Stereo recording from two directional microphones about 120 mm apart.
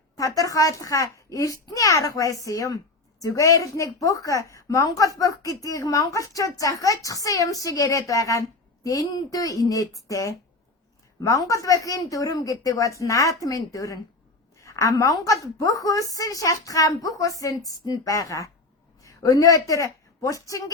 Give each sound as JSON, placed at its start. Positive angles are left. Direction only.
{"t": 0.2, "sound": "a woman's voice", "side_deg": 30}